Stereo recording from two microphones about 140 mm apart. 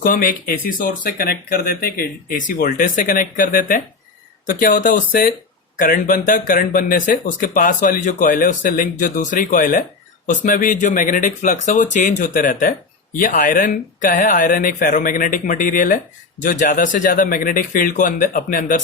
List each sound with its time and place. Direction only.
0.0 s speech: 80° left